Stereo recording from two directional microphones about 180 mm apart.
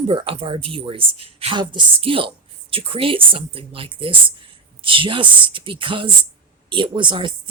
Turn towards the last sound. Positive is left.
turn(degrees=-25)  # may be behind; listen again after turning